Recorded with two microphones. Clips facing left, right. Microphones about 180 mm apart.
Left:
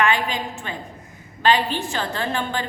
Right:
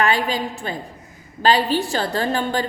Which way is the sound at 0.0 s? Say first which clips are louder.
Right 2 dB; 35° right (ahead or behind).